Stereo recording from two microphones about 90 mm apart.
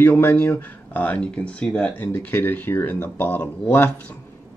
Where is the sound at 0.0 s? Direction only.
20° left (ahead or behind).